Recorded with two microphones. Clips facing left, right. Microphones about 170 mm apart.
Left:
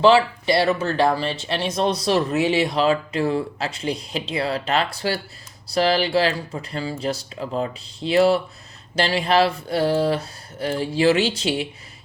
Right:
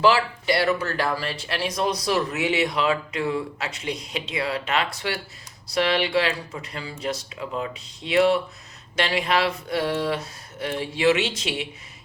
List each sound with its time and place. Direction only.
0.0 s speech: 25° left (ahead or behind)